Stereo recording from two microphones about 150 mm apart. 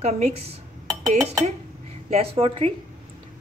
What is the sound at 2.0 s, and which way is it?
Speech, 40° right (ahead or behind).